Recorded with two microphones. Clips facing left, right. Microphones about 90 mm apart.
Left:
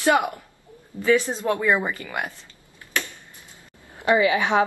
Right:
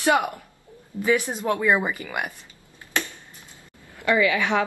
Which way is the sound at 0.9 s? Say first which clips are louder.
Right 1 dB; 25° left (ahead or behind).